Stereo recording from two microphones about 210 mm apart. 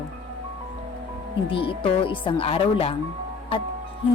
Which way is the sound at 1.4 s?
25° left (ahead or behind).